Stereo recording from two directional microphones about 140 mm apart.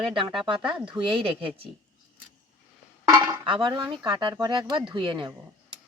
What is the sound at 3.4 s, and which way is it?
Speech, 35° right (ahead or behind).